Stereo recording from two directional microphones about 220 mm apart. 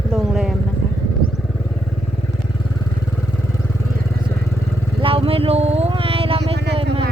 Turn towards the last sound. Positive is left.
turn(degrees=-50)  # may be behind; listen again after turning